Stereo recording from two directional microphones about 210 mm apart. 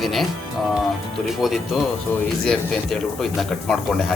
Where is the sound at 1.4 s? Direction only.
Centre (ahead or behind).